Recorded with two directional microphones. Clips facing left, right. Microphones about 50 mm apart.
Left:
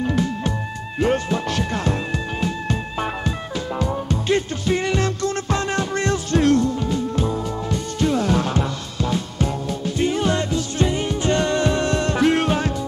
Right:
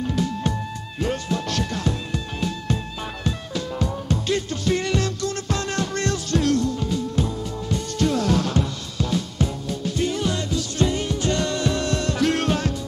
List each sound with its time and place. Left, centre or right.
0.9 s speech: left
3.8 s music: left
8.0 s music: centre